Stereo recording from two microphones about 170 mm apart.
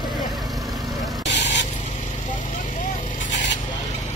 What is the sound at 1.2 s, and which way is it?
Vehicle, 90° left.